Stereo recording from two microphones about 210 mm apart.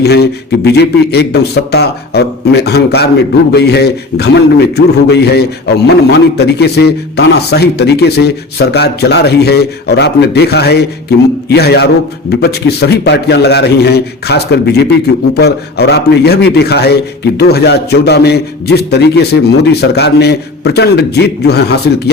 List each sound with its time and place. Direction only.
0.0 s a man's voice: 50° left (ahead or behind)